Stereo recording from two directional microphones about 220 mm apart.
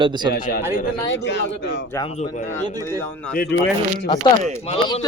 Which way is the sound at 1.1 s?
55° left (ahead or behind).